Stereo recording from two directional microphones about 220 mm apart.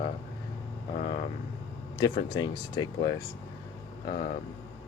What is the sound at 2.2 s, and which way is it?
Speech, 20° left (ahead or behind).